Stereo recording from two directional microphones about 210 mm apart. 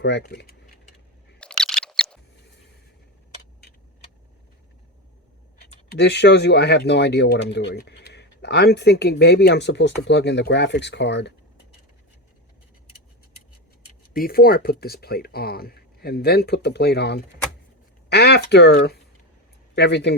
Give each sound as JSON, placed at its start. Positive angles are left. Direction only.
{"t": 0.0, "sound": "speech", "side_deg": 55}
{"t": 1.4, "sound": "a sound", "side_deg": 5}
{"t": 5.9, "sound": "speech", "side_deg": 55}
{"t": 14.1, "sound": "speech", "side_deg": 45}